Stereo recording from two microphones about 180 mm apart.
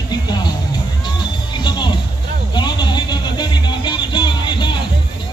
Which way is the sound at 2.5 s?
25° left (ahead or behind).